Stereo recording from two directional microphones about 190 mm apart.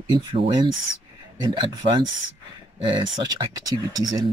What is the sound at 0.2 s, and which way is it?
Speech, 25° right (ahead or behind).